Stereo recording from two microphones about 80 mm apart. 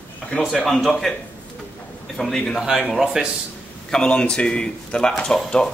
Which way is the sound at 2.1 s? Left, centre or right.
Centre.